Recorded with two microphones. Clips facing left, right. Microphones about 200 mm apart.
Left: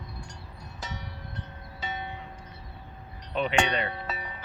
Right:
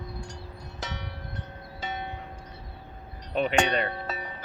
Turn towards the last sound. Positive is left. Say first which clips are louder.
# right 2 dB
turn(degrees=-40)  # may be behind; listen again after turning